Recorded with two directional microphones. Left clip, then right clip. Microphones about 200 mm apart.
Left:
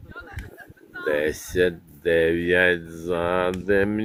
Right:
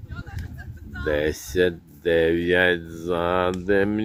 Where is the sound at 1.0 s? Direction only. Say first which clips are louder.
Even; 5° right (ahead or behind).